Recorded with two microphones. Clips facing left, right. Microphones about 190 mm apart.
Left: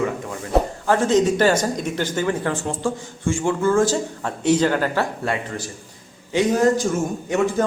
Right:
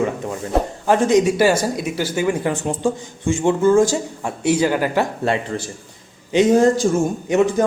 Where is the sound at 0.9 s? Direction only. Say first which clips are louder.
Right 4 dB; 15° right (ahead or behind).